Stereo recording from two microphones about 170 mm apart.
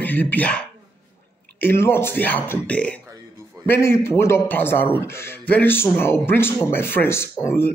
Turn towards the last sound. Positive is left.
turn(degrees=15)  # may be behind; listen again after turning